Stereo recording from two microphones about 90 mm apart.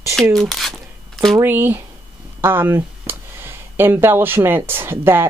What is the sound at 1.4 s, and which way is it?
Speech, 25° right (ahead or behind).